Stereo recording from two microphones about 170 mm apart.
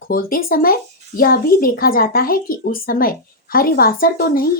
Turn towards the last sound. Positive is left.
turn(degrees=60)  # may be behind; listen again after turning